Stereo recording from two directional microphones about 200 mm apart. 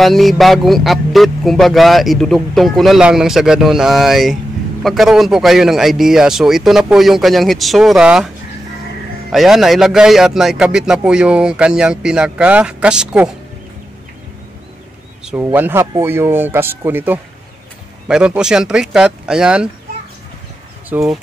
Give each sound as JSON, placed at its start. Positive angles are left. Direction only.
{"t": 0.0, "sound": "speech", "side_deg": 0}
{"t": 9.3, "sound": "speech", "side_deg": 0}
{"t": 15.2, "sound": "speech", "side_deg": -10}
{"t": 20.9, "sound": "speech", "side_deg": -10}